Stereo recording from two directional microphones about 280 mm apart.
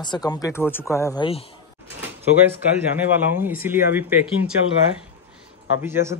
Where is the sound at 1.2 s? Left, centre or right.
Centre.